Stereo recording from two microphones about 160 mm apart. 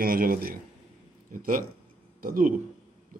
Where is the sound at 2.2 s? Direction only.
60° right (ahead or behind).